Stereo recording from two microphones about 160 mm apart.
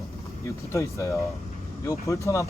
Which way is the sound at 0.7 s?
20° left (ahead or behind).